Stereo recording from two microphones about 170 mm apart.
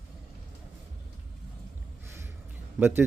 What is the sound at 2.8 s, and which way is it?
Speech, 10° right (ahead or behind).